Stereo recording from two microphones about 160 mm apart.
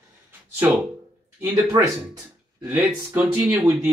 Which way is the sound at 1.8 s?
20° right (ahead or behind).